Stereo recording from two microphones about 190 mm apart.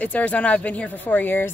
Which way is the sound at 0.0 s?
5° left (ahead or behind).